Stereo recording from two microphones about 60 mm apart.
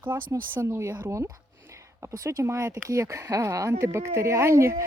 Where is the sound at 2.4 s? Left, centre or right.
Right.